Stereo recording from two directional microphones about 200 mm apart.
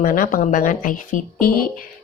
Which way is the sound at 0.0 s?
45° left (ahead or behind).